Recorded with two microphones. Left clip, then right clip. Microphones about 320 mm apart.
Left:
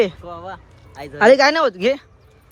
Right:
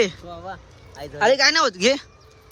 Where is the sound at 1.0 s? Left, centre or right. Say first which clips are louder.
Left 6 dB; centre.